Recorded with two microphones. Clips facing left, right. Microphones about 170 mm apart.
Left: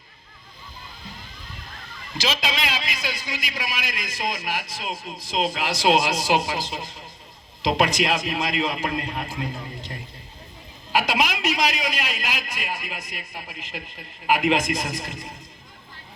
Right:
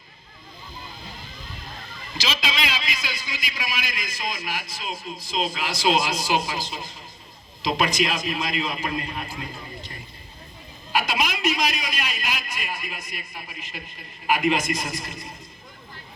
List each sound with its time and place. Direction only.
2.2 s a man's voice: 60° left (ahead or behind); by 10.0 s 80° left
10.9 s a man's voice: 90° left